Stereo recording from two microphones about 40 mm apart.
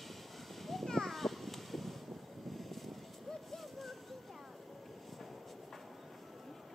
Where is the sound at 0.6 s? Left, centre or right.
Centre.